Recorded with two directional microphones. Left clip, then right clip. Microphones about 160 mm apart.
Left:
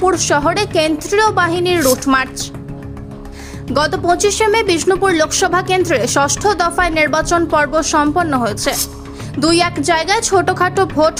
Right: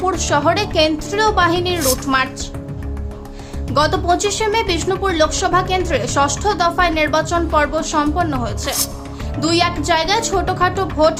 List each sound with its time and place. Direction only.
0.0 s speech: 30° left (ahead or behind)
3.8 s speech: 35° left (ahead or behind)